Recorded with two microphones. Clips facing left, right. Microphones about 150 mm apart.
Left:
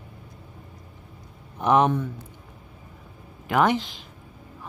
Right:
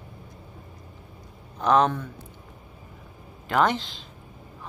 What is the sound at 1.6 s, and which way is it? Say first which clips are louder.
Speech: left 1 dB; 15° left (ahead or behind).